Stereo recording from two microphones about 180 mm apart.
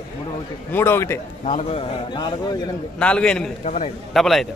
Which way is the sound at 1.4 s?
40° left (ahead or behind).